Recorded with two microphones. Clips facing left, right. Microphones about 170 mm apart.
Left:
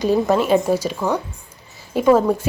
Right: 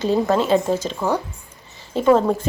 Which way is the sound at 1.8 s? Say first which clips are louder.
Left 1 dB; 10° left (ahead or behind).